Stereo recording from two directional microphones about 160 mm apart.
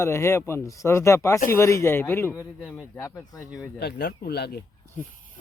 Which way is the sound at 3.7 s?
85° left.